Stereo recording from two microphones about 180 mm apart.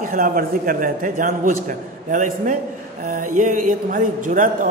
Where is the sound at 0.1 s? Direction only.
50° right (ahead or behind).